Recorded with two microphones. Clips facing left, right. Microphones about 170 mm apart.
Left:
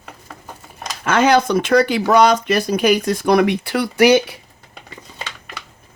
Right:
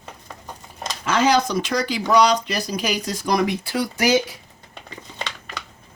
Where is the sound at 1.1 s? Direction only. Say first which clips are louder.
Left 4 dB; 55° left (ahead or behind).